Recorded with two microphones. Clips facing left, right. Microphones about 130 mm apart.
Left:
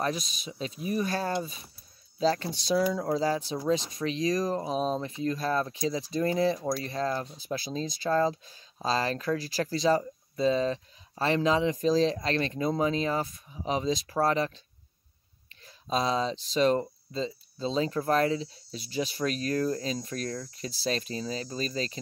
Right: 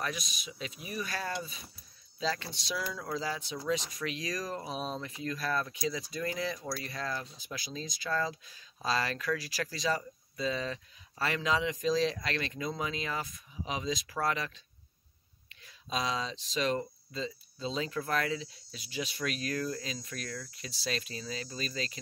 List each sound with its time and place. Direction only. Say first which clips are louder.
0.0 s speech: left 7 dB; 35° left (ahead or behind)
15.6 s speech: left 6 dB; 35° left (ahead or behind)